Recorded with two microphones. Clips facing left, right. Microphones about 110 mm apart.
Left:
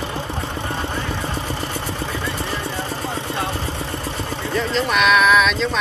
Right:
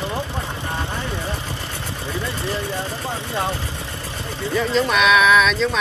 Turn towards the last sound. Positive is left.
turn(degrees=0)  # may be behind; listen again after turning